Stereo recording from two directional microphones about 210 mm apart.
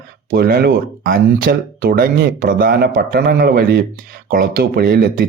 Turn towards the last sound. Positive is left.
turn(degrees=-45)  # may be behind; listen again after turning